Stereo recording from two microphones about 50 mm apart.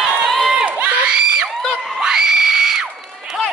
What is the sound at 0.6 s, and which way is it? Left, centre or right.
Crowd, right.